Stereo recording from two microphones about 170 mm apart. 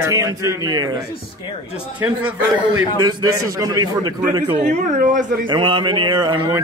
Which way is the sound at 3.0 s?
20° right (ahead or behind).